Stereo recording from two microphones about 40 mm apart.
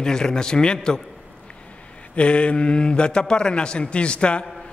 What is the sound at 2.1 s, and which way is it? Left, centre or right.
A man's voice, left.